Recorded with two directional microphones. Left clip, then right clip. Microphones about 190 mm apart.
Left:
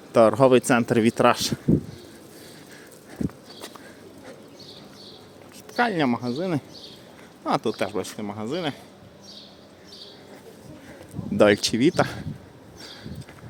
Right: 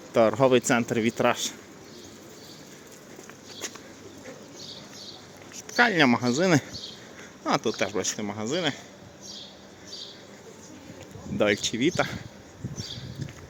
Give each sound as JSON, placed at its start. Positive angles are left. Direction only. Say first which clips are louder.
{"t": 0.1, "sound": "speech", "louder": "left 4 dB", "side_deg": 25}
{"t": 5.5, "sound": "a sound", "louder": "right 2 dB", "side_deg": 10}
{"t": 6.1, "sound": "speech", "louder": "right 4 dB", "side_deg": -5}
{"t": 7.4, "sound": "speech", "louder": "left 1 dB", "side_deg": 15}
{"t": 11.3, "sound": "speech", "louder": "left 6 dB", "side_deg": 35}